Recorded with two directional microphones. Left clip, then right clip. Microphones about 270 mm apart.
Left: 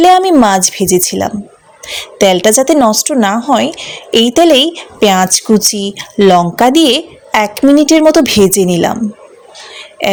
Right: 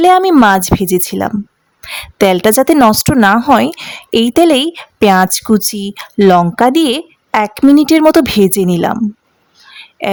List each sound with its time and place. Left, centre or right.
0.0 s a woman's voice: right
10.0 s speech: centre